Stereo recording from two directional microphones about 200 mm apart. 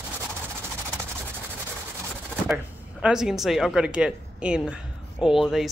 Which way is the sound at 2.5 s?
5° right (ahead or behind).